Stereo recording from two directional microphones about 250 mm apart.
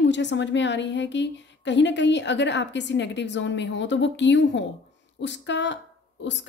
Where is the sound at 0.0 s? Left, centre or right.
Left.